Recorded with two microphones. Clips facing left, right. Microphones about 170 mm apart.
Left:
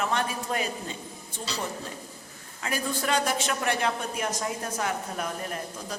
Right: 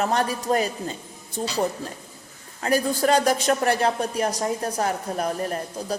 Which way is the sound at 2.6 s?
40° right (ahead or behind).